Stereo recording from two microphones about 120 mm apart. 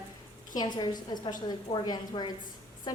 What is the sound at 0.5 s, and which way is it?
A woman's voice, 35° left (ahead or behind).